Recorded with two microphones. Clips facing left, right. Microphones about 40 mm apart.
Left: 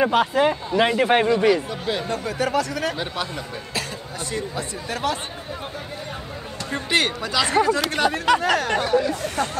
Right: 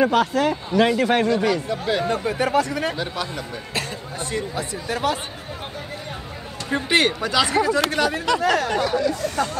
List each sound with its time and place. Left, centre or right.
0.0 s a man's voice: centre
1.7 s speech: centre
2.0 s speech: right
4.6 s speech: centre
6.7 s speech: centre
7.4 s a man's voice: centre